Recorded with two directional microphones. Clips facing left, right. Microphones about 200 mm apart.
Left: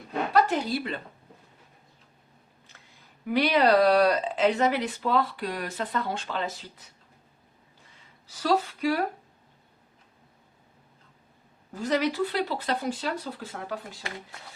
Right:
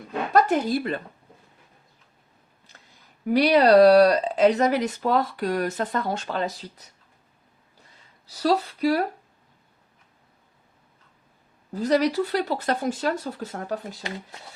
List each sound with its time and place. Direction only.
0.3 s speech: 50° right (ahead or behind)
3.2 s speech: 40° right (ahead or behind)
8.3 s speech: 35° right (ahead or behind)
11.7 s speech: 35° right (ahead or behind)